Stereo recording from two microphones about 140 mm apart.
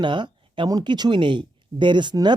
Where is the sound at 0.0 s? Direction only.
35° right (ahead or behind).